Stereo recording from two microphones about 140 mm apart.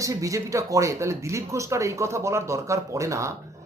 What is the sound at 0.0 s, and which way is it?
Speech, 25° right (ahead or behind).